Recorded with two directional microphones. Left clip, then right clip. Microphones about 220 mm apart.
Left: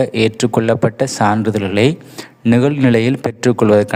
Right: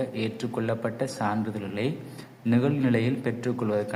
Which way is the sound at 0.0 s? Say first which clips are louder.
Left 16 dB; 45° left (ahead or behind).